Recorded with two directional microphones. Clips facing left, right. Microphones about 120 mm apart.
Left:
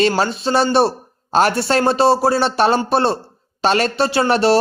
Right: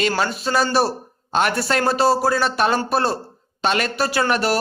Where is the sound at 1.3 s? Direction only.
35° left (ahead or behind).